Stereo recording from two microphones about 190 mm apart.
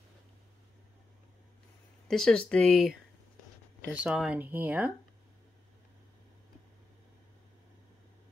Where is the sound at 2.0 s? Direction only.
5° left (ahead or behind).